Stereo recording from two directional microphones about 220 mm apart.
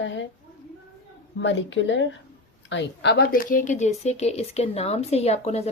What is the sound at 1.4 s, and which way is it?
A woman's voice, 55° left (ahead or behind).